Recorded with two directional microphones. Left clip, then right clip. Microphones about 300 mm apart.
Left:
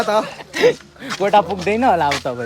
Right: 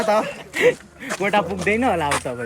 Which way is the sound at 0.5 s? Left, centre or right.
Centre.